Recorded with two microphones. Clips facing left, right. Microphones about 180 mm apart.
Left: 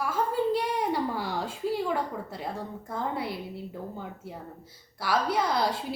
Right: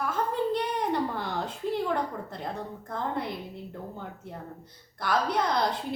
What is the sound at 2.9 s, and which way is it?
A woman's voice, 5° left (ahead or behind).